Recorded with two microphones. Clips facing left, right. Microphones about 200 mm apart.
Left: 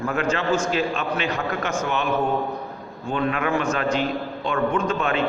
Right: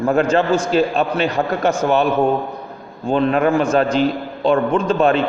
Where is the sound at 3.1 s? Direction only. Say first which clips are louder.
Right 8 dB; 35° right (ahead or behind).